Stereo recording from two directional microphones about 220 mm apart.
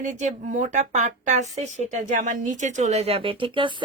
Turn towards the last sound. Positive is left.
turn(degrees=-20)  # may be behind; listen again after turning